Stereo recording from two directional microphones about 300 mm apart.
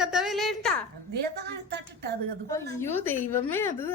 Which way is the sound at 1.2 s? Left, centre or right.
Right.